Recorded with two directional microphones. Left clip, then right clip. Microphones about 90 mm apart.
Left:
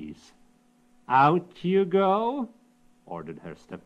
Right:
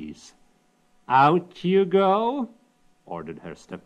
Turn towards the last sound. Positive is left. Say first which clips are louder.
# right 3 dB
turn(degrees=25)  # may be behind; listen again after turning